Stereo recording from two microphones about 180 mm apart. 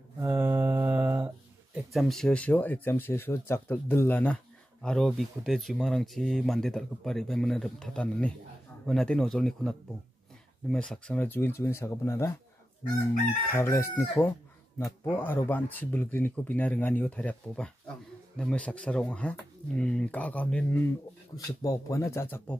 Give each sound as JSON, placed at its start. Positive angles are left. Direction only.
{"t": 0.2, "sound": "mantra", "side_deg": -10}
{"t": 1.9, "sound": "speech", "side_deg": 0}
{"t": 13.6, "sound": "speech", "side_deg": 15}
{"t": 21.4, "sound": "speech", "side_deg": 20}